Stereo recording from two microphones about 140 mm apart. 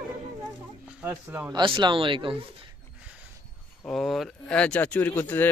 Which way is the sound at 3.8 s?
Centre (ahead or behind).